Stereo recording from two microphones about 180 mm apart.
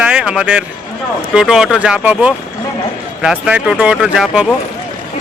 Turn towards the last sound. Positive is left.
turn(degrees=-5)  # may be behind; listen again after turning